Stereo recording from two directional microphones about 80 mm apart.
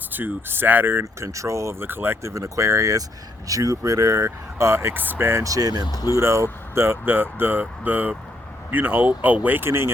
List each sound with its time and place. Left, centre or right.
0.1 s speech: right
1.3 s speech: right
2.3 s speech: right
5.4 s speech: right
5.8 s speech: left
6.1 s speech: right